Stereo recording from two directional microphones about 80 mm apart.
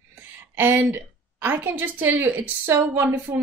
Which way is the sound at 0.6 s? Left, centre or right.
Right.